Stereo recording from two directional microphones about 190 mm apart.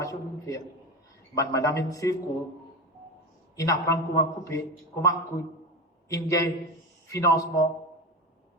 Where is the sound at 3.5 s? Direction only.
15° left (ahead or behind).